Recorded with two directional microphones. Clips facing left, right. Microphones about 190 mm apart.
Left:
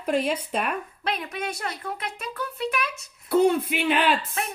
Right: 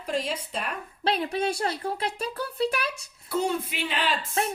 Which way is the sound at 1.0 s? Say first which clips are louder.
Right 6 dB; 30° right (ahead or behind).